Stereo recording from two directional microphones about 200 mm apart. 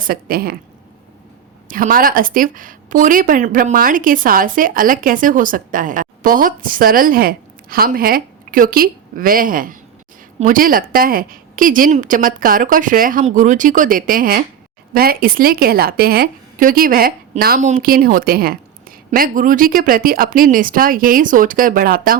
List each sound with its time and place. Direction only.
0.0 s a woman's voice: 45° right (ahead or behind)
1.6 s a woman's voice: 45° right (ahead or behind)